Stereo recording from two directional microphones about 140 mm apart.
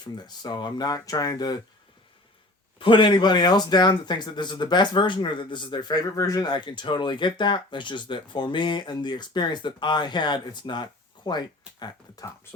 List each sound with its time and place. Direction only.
0.0 s speech: 30° left (ahead or behind)
2.7 s speech: 35° left (ahead or behind)